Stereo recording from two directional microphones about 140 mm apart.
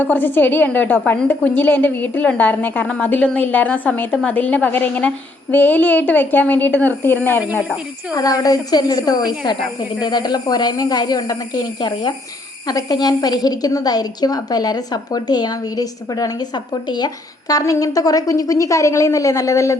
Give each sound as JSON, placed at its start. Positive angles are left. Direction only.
{"t": 0.0, "sound": "a woman's voice", "side_deg": 15}
{"t": 8.1, "sound": "a woman's voice", "side_deg": 25}